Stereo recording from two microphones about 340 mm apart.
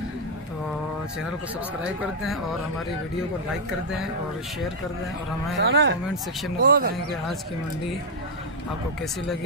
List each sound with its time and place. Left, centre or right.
5.6 s speech: right